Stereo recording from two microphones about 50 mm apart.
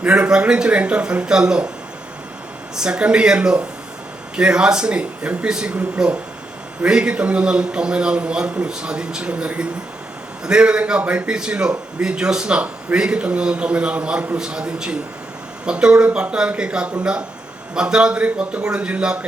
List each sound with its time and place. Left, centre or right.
0.0 s speech: centre
2.7 s speech: centre
5.7 s speech: right